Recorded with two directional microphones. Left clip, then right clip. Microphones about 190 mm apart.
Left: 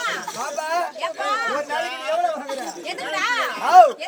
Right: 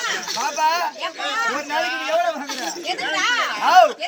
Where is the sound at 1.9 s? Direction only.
65° left (ahead or behind).